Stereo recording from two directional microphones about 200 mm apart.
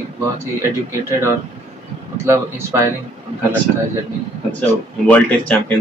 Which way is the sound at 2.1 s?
15° right (ahead or behind).